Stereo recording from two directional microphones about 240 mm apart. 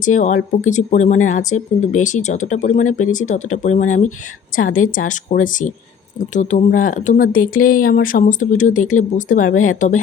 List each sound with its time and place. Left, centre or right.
0.0 s speech: left